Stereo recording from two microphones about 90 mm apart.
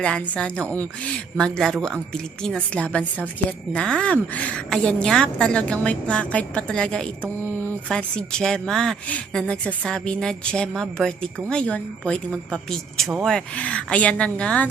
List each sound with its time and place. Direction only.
0.0 s a woman's voice: 10° left (ahead or behind)
7.3 s a sound: 20° left (ahead or behind)
7.9 s a woman's voice: 10° left (ahead or behind)